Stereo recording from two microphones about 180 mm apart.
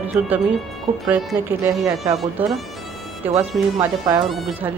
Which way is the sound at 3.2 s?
10° right (ahead or behind).